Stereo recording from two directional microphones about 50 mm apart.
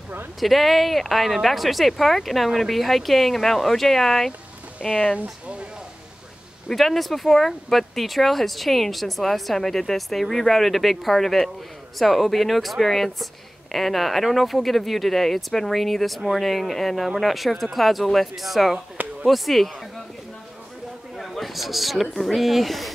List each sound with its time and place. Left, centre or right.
0.4 s speech: centre
5.1 s speech: right
6.7 s speech: centre
21.2 s speech: centre